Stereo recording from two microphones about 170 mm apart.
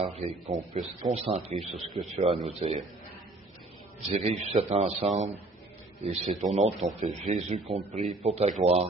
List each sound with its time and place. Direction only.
0.0 s a man's voice: 40° right (ahead or behind)
1.5 s speech: centre (ahead or behind)
2.1 s a man's voice: 35° right (ahead or behind)
4.1 s a man's voice: 35° right (ahead or behind)